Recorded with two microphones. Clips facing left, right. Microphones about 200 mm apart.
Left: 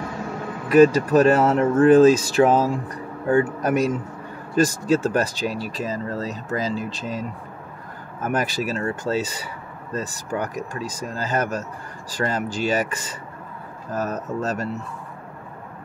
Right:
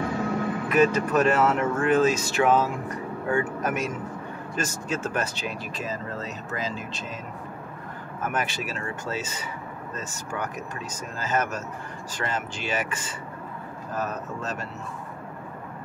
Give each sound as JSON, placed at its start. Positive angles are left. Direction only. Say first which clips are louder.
{"t": 0.7, "sound": "speech", "louder": "left 8 dB", "side_deg": 35}
{"t": 8.3, "sound": "speech", "louder": "left 7 dB", "side_deg": 35}